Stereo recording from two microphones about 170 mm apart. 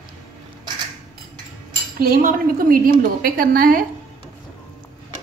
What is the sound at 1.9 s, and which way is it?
A woman's voice, 60° right (ahead or behind).